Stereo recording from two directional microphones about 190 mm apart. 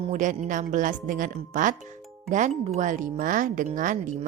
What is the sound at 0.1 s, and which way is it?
Speech, 40° right (ahead or behind).